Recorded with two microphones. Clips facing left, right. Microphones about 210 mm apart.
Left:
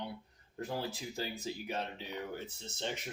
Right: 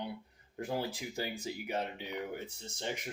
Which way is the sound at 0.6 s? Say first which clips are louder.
Right 2 dB; 15° right (ahead or behind).